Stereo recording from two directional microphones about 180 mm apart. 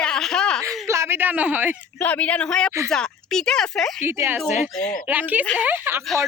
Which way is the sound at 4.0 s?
15° right (ahead or behind).